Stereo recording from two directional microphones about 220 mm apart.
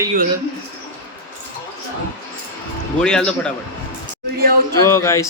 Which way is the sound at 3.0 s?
5° left (ahead or behind).